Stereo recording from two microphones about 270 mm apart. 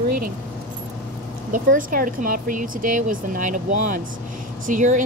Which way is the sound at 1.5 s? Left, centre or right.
Right.